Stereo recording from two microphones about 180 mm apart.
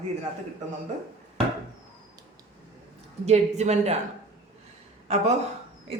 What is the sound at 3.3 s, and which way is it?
Speech, 40° right (ahead or behind).